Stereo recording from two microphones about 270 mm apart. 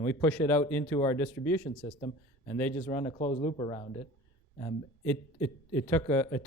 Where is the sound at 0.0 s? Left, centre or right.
Centre.